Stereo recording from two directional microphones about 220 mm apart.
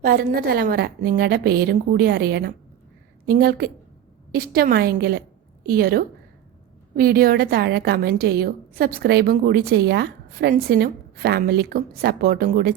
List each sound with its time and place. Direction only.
0.0 s a woman's voice: 45° right (ahead or behind)